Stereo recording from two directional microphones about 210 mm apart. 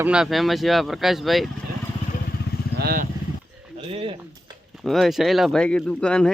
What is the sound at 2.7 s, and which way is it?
Vehicle, 45° right (ahead or behind).